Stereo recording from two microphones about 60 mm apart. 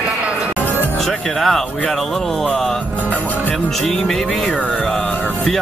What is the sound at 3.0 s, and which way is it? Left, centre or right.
Music, left.